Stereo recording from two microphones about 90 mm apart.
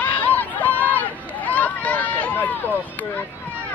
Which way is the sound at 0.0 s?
20° left (ahead or behind).